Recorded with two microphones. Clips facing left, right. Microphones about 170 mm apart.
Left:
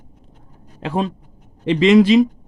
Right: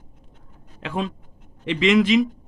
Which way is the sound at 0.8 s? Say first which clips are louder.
Left 5 dB; 35° left (ahead or behind).